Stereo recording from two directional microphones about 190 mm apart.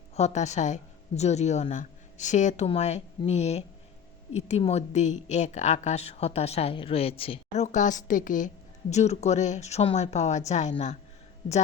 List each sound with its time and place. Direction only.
0.2 s speech: 35° left (ahead or behind)